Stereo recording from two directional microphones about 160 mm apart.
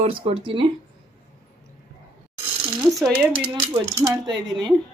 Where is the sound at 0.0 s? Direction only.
35° right (ahead or behind).